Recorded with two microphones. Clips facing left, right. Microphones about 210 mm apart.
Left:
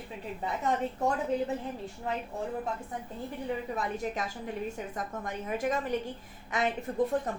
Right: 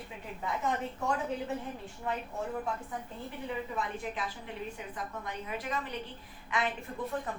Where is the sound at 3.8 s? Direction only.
40° left (ahead or behind).